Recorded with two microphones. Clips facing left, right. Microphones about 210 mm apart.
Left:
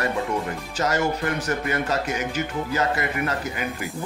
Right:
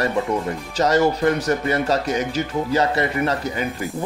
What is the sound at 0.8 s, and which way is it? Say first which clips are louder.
Speech: right 7 dB; 35° right (ahead or behind).